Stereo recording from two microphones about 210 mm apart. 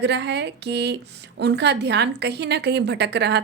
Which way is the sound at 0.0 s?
55° right (ahead or behind).